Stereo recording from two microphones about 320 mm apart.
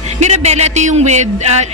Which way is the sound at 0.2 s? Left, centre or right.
Right.